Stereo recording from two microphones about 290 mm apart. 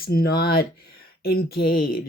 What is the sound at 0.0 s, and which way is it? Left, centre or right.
Speech, left.